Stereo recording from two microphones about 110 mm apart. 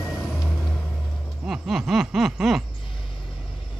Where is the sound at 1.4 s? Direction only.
5° right (ahead or behind).